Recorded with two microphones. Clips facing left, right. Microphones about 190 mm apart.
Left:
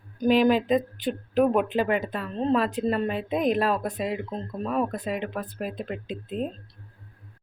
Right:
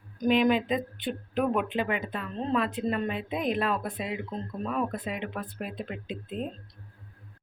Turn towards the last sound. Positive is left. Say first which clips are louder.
# left 3 dB
turn(degrees=45)  # may be behind; listen again after turning